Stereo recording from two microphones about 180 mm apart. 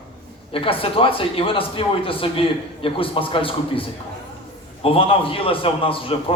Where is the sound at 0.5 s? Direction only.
30° left (ahead or behind).